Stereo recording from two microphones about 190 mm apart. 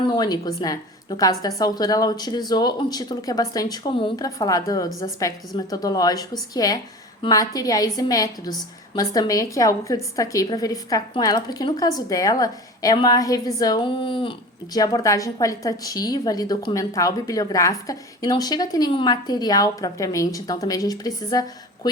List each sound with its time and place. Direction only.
0.1 s a woman's voice: 20° left (ahead or behind)